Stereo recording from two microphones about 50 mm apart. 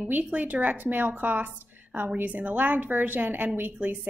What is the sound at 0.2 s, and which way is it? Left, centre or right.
A woman's voice, right.